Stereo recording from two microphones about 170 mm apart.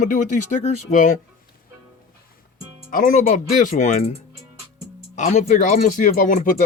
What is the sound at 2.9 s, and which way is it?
Speech, 55° left (ahead or behind).